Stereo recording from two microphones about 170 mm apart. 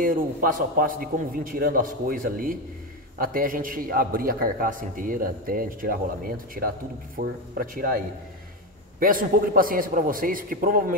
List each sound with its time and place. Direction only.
0.0 s a man's voice: 55° right (ahead or behind)
9.0 s a man's voice: 55° right (ahead or behind)